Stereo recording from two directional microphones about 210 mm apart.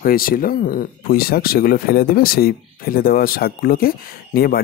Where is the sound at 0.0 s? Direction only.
45° left (ahead or behind).